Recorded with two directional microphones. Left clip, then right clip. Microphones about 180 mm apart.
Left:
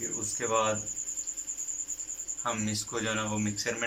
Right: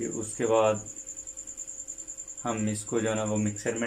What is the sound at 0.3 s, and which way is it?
Speech, 45° right (ahead or behind).